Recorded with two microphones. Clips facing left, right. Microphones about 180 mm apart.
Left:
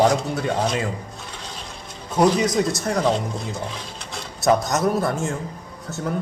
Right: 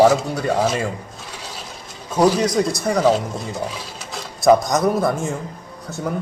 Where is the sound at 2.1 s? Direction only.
5° right (ahead or behind).